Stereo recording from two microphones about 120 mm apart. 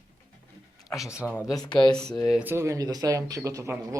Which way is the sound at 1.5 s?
35° left (ahead or behind).